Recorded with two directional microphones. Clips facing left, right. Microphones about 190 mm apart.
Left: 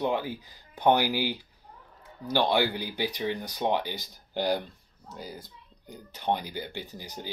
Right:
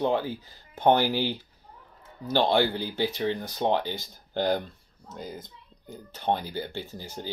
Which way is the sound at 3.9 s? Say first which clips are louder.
Right 3 dB; 50° right (ahead or behind).